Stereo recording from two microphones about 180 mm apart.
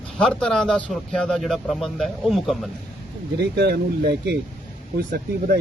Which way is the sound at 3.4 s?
65° right (ahead or behind).